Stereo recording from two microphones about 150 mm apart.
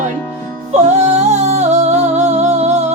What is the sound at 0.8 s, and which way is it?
Music, 50° right (ahead or behind).